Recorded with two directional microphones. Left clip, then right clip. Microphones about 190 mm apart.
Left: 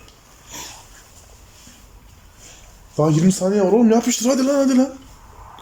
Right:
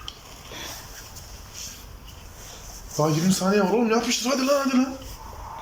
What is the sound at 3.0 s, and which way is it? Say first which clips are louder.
A man's voice: left 5 dB; 30° left (ahead or behind).